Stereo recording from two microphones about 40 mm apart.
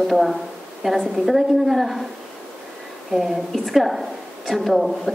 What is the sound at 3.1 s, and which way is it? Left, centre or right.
A woman's voice, centre.